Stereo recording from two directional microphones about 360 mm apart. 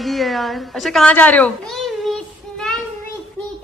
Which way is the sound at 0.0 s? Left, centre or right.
Centre.